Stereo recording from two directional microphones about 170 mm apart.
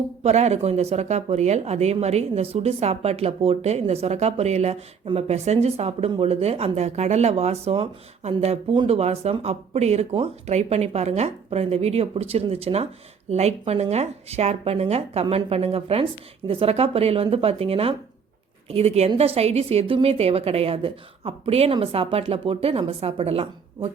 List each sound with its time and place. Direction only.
0.2 s speech: 40° right (ahead or behind)